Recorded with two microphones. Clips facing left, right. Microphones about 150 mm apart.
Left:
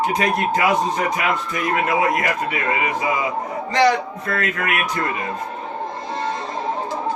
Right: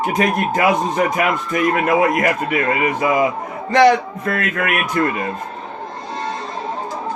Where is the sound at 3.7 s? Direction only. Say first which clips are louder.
Right 5 dB; 50° right (ahead or behind).